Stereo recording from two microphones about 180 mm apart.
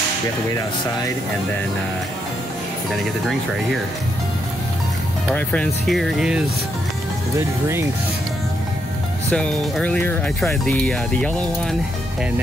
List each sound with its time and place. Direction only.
5.3 s speech: 10° left (ahead or behind)
7.3 s speech: 15° right (ahead or behind)
9.3 s speech: 5° left (ahead or behind)